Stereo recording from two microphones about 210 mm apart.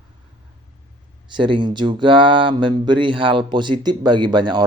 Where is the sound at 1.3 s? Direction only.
20° right (ahead or behind).